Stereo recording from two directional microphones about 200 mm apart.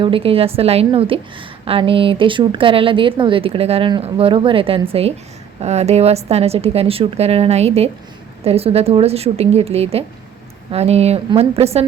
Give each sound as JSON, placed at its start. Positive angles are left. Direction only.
{"t": 0.0, "sound": "a woman's voice", "side_deg": -30}